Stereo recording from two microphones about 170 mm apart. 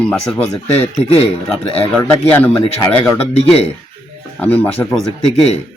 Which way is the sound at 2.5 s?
25° left (ahead or behind).